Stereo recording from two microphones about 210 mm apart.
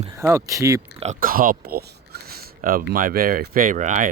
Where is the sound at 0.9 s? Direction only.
35° right (ahead or behind).